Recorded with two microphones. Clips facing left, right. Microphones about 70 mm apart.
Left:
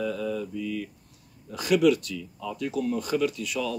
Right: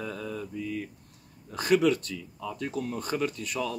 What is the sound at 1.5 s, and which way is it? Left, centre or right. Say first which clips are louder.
Speech: left 2 dB; right.